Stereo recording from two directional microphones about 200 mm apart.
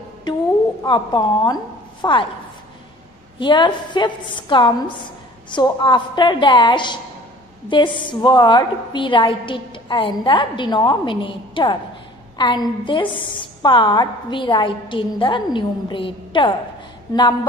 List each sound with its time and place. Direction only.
0.3 s a sound: 20° left (ahead or behind)
0.8 s a woman's voice: 20° left (ahead or behind)
3.3 s a woman's voice: 25° left (ahead or behind)